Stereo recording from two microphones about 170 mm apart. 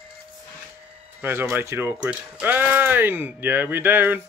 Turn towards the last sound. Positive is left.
turn(degrees=-10)  # may be behind; listen again after turning